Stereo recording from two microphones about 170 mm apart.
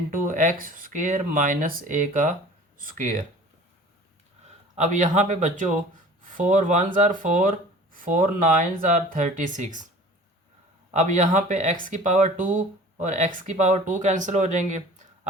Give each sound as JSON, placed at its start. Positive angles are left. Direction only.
{"t": 0.1, "sound": "speech", "side_deg": -50}
{"t": 4.8, "sound": "speech", "side_deg": -50}
{"t": 10.9, "sound": "speech", "side_deg": -45}